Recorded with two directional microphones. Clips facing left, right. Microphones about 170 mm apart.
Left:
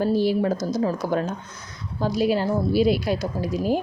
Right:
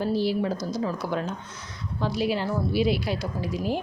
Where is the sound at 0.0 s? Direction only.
45° left (ahead or behind).